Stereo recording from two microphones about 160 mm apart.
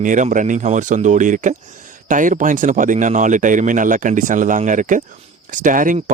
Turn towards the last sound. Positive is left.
turn(degrees=-55)  # may be behind; listen again after turning